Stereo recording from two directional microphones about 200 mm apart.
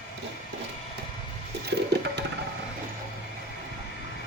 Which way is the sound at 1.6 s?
55° right (ahead or behind).